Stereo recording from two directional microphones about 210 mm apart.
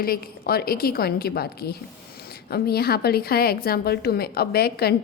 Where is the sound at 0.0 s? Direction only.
45° left (ahead or behind).